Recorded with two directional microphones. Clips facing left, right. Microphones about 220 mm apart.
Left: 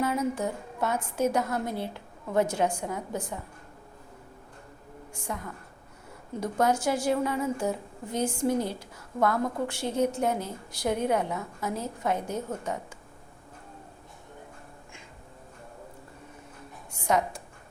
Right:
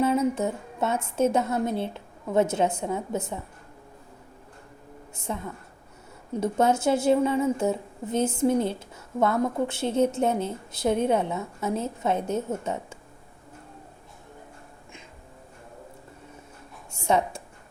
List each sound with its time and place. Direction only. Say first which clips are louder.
0.0 s a woman's voice: right 5 dB; 25° right (ahead or behind)
5.1 s a woman's voice: right 4 dB; 25° right (ahead or behind)
17.1 s a woman's voice: right 2 dB; 25° right (ahead or behind)